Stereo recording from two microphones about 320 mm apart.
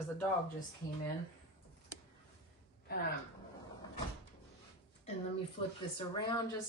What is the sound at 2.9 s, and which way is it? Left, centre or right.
Speech, left.